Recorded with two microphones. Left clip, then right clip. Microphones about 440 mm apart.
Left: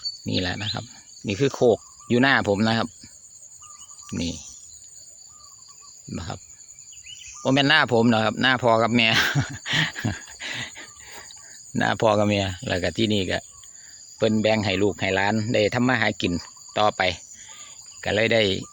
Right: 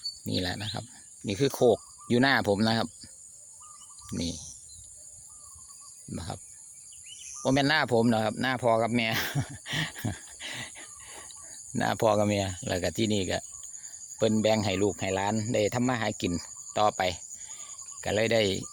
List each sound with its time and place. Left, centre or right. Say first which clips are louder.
0.3 s speech: left 5 dB; right
4.1 s speech: left 4 dB; right
6.1 s speech: left 4 dB; right
7.4 s speech: left 6 dB; right